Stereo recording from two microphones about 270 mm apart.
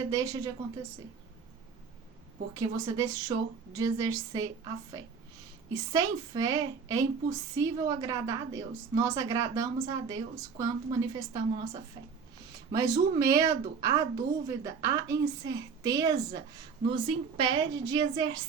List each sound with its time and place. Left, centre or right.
0.1 s a woman's voice: centre
2.6 s a woman's voice: centre